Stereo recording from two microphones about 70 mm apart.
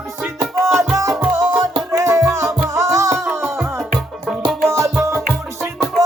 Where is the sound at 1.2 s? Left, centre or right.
Centre.